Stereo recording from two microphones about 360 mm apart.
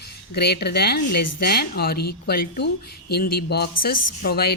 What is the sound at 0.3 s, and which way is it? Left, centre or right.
Speech, left.